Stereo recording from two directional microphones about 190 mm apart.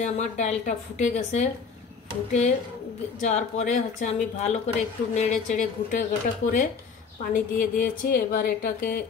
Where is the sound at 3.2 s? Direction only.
40° left (ahead or behind).